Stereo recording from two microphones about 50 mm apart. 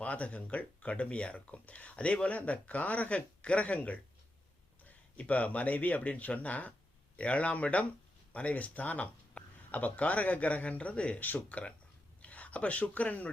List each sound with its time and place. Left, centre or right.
0.0 s speech: left
11.2 s speech: left
12.2 s a sound: left
12.8 s speech: left